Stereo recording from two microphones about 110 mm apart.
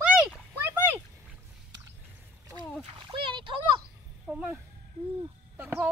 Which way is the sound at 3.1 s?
50° right (ahead or behind).